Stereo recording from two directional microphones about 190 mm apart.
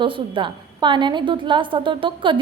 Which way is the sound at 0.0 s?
25° right (ahead or behind).